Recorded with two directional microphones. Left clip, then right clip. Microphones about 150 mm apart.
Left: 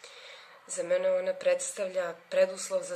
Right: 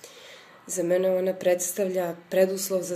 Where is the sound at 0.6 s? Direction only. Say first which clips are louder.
Right 4 dB; 15° left (ahead or behind).